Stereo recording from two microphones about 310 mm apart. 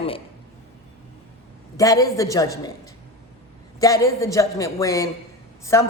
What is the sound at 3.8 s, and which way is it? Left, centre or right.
A woman's voice, centre.